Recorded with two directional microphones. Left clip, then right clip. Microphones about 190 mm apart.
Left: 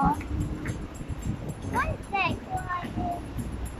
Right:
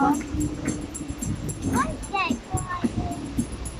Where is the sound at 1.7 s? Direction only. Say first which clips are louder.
Right 2 dB; centre (ahead or behind).